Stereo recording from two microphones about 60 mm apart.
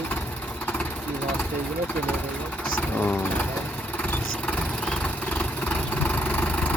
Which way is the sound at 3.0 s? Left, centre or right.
Left.